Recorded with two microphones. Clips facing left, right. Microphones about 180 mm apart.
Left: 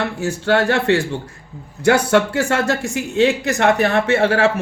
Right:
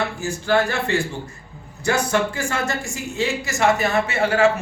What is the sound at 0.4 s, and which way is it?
A man's voice, 65° left (ahead or behind).